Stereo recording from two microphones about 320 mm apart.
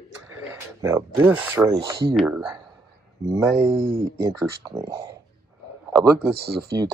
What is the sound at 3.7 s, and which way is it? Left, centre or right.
Speech, right.